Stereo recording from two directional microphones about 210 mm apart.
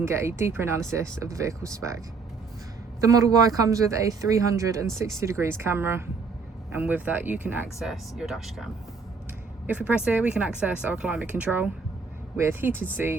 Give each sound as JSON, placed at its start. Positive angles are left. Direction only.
{"t": 0.0, "sound": "speech", "side_deg": -10}
{"t": 3.0, "sound": "speech", "side_deg": -15}